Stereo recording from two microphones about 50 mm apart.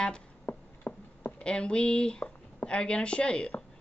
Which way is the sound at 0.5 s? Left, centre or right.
Left.